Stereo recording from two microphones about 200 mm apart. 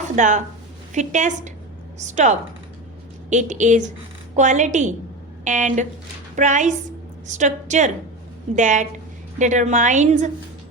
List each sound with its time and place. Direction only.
0.2 s a woman's voice: 40° right (ahead or behind)